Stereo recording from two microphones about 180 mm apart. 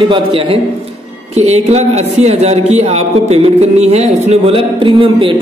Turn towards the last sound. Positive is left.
turn(degrees=-30)  # may be behind; listen again after turning